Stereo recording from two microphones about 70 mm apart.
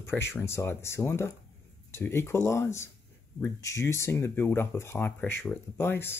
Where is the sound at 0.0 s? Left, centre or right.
Left.